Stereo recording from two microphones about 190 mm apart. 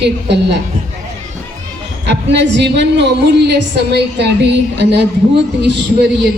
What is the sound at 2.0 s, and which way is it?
A woman's voice, 65° right (ahead or behind).